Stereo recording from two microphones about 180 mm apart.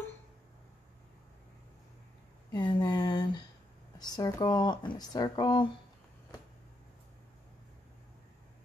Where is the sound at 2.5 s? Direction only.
25° left (ahead or behind).